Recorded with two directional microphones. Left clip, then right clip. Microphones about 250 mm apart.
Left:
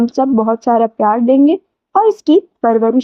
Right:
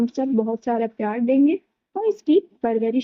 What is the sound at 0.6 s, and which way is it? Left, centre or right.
Speech, left.